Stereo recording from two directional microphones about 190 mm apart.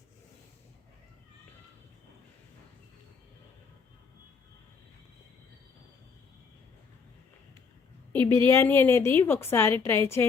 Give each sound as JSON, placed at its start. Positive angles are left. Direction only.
{"t": 8.2, "sound": "a woman's voice", "side_deg": -25}
{"t": 8.4, "sound": "a woman's voice", "side_deg": 10}